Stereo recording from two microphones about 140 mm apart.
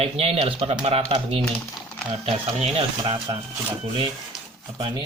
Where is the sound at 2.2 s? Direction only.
45° right (ahead or behind).